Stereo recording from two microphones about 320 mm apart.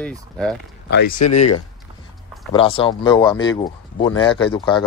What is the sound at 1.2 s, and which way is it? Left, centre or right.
Speech, left.